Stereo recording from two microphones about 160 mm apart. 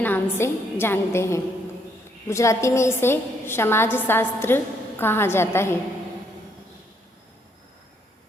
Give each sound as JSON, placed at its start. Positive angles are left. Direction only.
{"t": 0.0, "sound": "a woman's voice", "side_deg": 15}